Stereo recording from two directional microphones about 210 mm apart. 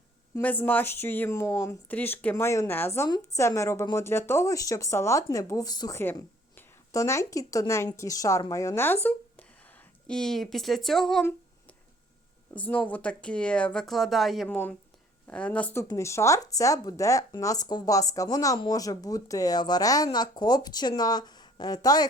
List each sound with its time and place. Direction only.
0.3 s speech: 10° left (ahead or behind)
12.5 s speech: 5° left (ahead or behind)